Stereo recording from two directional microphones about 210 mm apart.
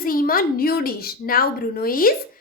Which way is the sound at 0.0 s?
45° left (ahead or behind).